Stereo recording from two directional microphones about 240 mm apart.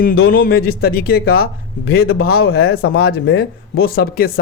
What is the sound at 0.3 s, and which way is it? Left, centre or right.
A man's voice, left.